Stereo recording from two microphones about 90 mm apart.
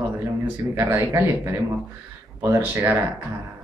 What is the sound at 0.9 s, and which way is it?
A woman's voice, 30° right (ahead or behind).